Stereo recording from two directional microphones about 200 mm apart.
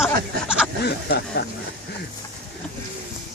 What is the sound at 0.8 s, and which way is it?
Speech, 55° left (ahead or behind).